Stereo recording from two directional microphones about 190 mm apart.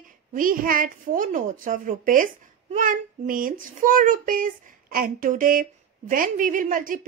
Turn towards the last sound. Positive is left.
turn(degrees=-45)  # may be behind; listen again after turning